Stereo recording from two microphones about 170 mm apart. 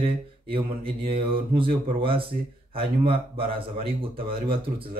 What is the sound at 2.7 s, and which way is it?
Speech, 35° right (ahead or behind).